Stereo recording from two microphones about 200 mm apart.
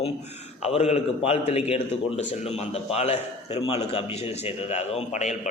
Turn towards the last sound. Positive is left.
turn(degrees=35)  # may be behind; listen again after turning